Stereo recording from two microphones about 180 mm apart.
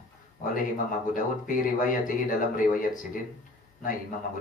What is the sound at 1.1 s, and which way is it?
Speech, 45° left (ahead or behind).